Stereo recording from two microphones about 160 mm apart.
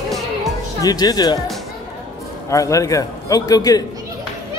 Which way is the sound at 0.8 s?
25° left (ahead or behind).